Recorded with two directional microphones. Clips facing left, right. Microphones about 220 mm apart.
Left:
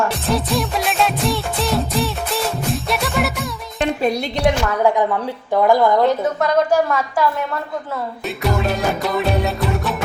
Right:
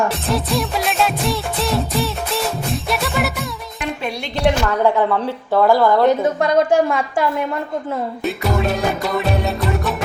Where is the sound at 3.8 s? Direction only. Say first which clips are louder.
Left 7 dB; 40° left (ahead or behind).